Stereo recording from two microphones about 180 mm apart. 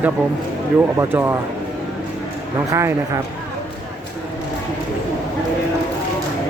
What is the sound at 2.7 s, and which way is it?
Speech, 15° right (ahead or behind).